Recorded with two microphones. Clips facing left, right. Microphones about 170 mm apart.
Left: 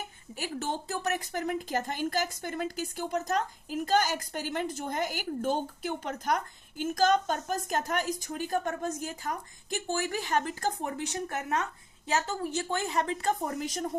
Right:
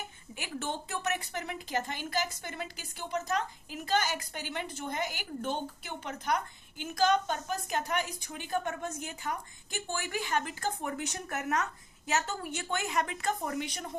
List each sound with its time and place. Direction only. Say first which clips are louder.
0.3 s a woman's voice: left 3 dB; 40° left (ahead or behind)